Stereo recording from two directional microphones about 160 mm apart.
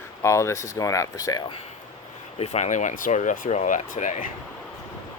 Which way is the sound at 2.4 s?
45° left (ahead or behind).